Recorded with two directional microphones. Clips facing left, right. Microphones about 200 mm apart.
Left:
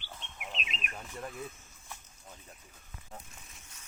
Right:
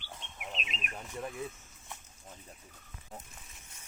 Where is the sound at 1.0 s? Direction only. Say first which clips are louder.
Right 3 dB; 10° right (ahead or behind).